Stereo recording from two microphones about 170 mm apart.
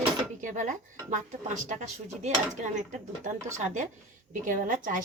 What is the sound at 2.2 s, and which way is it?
Speech, 45° right (ahead or behind).